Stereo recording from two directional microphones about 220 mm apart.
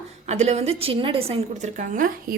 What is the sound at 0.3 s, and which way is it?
A woman's voice, 30° right (ahead or behind).